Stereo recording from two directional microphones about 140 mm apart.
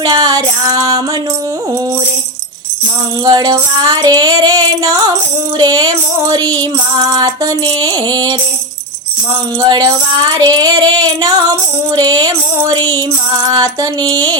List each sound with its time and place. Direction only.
0.0 s female singing: 30° right (ahead or behind)
3.2 s female singing: 30° right (ahead or behind)
9.6 s female singing: 30° right (ahead or behind)
12.7 s music: 15° left (ahead or behind)
13.4 s female singing: 25° right (ahead or behind)